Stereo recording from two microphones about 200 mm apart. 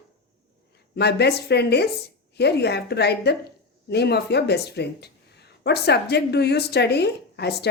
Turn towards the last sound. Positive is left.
turn(degrees=55)  # may be behind; listen again after turning